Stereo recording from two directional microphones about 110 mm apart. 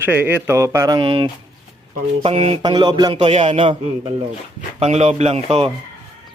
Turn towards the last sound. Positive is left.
turn(degrees=-65)  # may be behind; listen again after turning